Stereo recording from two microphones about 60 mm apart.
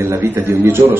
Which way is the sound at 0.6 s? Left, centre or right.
Right.